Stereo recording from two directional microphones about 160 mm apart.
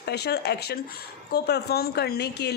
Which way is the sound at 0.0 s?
90° left.